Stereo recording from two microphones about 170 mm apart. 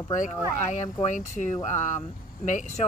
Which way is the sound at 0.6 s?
45° left (ahead or behind).